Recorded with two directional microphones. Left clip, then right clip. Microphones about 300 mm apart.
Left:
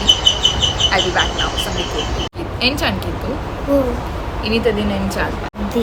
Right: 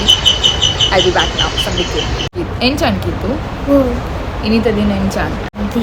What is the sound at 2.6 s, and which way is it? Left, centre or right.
A woman's voice, centre.